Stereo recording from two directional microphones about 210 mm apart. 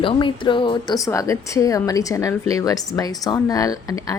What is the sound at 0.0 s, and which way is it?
Speech, 25° left (ahead or behind).